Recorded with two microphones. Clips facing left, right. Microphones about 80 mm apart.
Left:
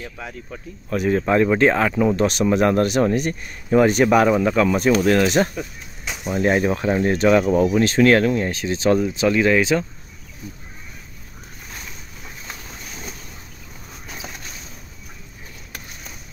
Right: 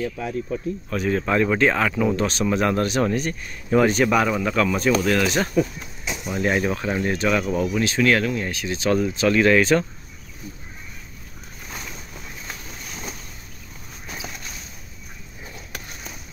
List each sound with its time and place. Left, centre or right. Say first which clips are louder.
0.9 s speech: left 4 dB; left
5.0 s speech: left 4 dB; left
9.0 s speech: even; centre